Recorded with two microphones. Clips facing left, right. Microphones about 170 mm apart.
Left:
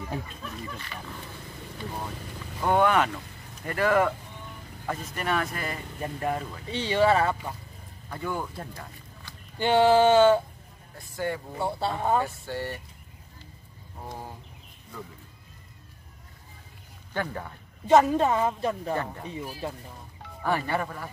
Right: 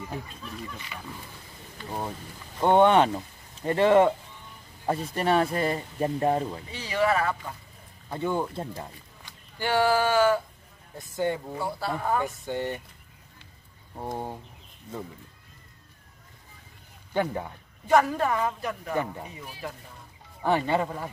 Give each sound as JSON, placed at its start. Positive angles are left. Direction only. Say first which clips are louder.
{"t": 2.6, "sound": "speech", "louder": "right 4 dB", "side_deg": -25}
{"t": 6.7, "sound": "a woman's voice", "louder": "left 4 dB", "side_deg": 30}
{"t": 8.1, "sound": "speech", "louder": "right 4 dB", "side_deg": -25}
{"t": 9.6, "sound": "a woman's voice", "louder": "left 4 dB", "side_deg": 20}
{"t": 11.0, "sound": "speech", "louder": "right 3 dB", "side_deg": -20}
{"t": 11.5, "sound": "a woman's voice", "louder": "left 1 dB", "side_deg": 25}
{"t": 12.3, "sound": "speech", "louder": "right 3 dB", "side_deg": -20}
{"t": 13.9, "sound": "speech", "louder": "right 6 dB", "side_deg": -25}
{"t": 17.1, "sound": "speech", "louder": "right 5 dB", "side_deg": -15}
{"t": 17.8, "sound": "a woman's voice", "louder": "left 3 dB", "side_deg": 20}
{"t": 20.4, "sound": "speech", "louder": "right 3 dB", "side_deg": -20}